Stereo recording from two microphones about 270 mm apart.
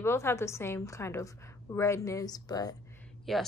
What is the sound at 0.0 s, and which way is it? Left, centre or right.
A woman's voice, centre.